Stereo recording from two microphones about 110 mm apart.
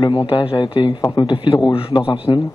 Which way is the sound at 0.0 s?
50° left (ahead or behind).